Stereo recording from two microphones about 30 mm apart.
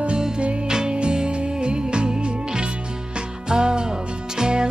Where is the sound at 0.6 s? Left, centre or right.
Right.